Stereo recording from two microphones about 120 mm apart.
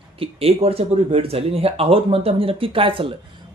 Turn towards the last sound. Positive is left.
turn(degrees=-45)  # may be behind; listen again after turning